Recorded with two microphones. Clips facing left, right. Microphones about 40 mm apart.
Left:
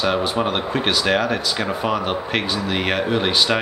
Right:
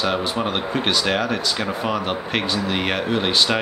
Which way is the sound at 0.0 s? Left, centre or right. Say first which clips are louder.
Left 2 dB; centre.